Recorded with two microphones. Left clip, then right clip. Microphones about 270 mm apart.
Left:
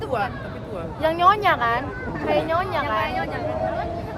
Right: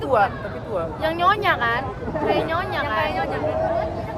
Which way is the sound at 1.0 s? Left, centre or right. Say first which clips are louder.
Left 3 dB; centre.